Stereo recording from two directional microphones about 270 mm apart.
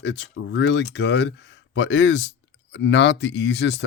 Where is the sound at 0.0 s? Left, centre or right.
Left.